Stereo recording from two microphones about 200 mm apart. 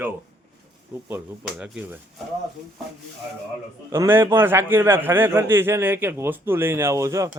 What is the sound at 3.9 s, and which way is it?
A man's voice, 10° right (ahead or behind).